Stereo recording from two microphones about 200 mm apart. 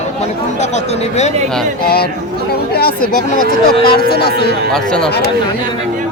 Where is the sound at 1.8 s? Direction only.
50° left (ahead or behind).